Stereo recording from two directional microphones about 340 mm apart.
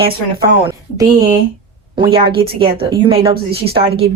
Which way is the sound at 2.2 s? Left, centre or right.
Centre.